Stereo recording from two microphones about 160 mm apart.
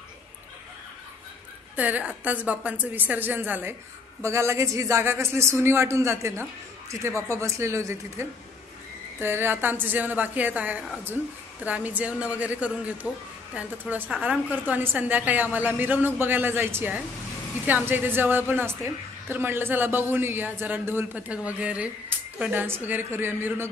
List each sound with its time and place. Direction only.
1.8 s a woman's voice: 10° right (ahead or behind)